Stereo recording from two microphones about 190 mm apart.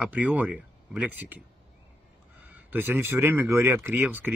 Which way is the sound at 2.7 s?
10° right (ahead or behind).